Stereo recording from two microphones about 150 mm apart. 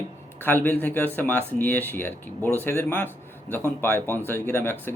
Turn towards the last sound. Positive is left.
turn(degrees=15)  # may be behind; listen again after turning